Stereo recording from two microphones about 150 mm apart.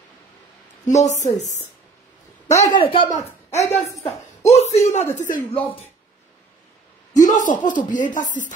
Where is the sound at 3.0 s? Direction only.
55° left (ahead or behind); by 5.9 s 40° left (ahead or behind).